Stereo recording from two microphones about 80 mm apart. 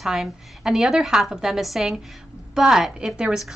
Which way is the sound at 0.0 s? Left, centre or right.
Centre.